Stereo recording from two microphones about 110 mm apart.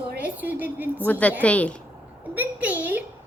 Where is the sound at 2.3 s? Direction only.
15° right (ahead or behind).